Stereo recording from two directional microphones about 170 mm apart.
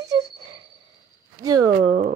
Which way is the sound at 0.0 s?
20° right (ahead or behind).